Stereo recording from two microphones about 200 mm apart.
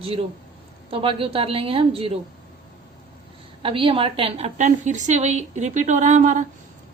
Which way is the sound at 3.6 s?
25° right (ahead or behind).